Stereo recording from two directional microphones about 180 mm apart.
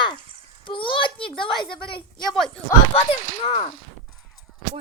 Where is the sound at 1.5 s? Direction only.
5° left (ahead or behind).